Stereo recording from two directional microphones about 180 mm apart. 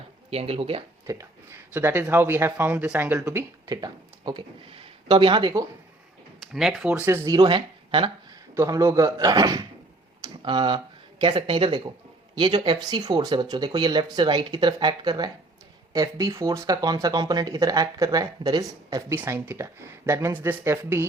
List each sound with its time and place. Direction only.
0.3 s speech: 35° right (ahead or behind)
1.0 s speech: 15° right (ahead or behind)
6.4 s speech: centre (ahead or behind)
7.3 s speech: 25° right (ahead or behind)